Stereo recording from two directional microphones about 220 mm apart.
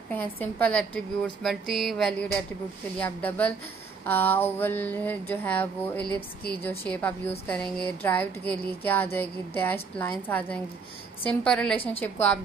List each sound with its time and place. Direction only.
0.1 s a woman's voice: 5° left (ahead or behind)
11.7 s a woman's voice: 25° left (ahead or behind)
12.0 s a woman's voice: 10° left (ahead or behind)